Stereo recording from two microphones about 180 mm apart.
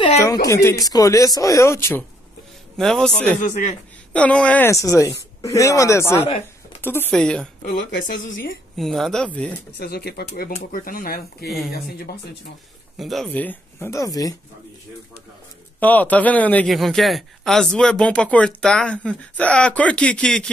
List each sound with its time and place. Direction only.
0.5 s speech: 15° left (ahead or behind)
2.8 s speech: 5° left (ahead or behind)
3.4 s speech: 45° left (ahead or behind)
4.1 s speech: 5° left (ahead or behind)
8.7 s speech: centre (ahead or behind)
9.8 s speech: 60° left (ahead or behind)
10.5 s speech: 50° left (ahead or behind)
12.9 s speech: centre (ahead or behind); by 14.3 s 20° left (ahead or behind)
15.8 s speech: 10° left (ahead or behind)